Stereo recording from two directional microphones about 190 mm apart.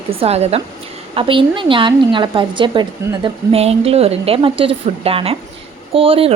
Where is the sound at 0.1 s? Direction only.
30° right (ahead or behind).